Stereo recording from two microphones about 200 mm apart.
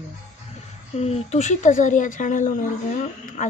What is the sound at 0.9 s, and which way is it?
Speech, 30° left (ahead or behind).